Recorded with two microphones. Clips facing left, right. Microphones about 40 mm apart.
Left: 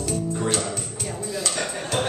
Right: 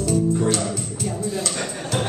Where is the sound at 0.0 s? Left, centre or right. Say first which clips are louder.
Right 6 dB; centre.